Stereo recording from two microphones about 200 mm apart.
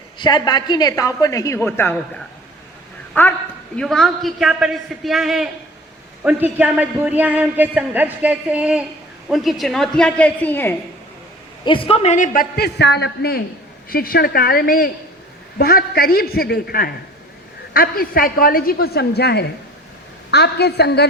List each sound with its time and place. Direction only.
0.2 s a woman's voice: 20° left (ahead or behind)
3.1 s a woman's voice: 10° left (ahead or behind)
11.6 s a man's voice: 25° left (ahead or behind); by 21.1 s 55° left (ahead or behind)